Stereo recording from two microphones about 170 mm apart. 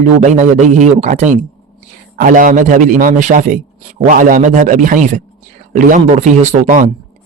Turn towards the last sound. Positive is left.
turn(degrees=-45)  # may be behind; listen again after turning